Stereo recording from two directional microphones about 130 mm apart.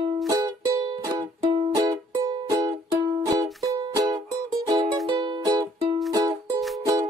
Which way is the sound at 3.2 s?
30° right (ahead or behind).